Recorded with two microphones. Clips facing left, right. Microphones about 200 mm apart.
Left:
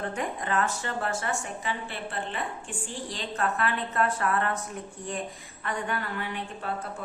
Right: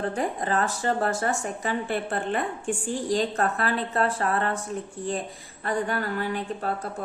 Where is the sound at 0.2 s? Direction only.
35° right (ahead or behind).